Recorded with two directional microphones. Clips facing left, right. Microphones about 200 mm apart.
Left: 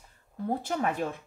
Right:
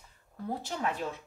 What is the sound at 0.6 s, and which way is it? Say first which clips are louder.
Speech: left 3 dB; 55° left (ahead or behind).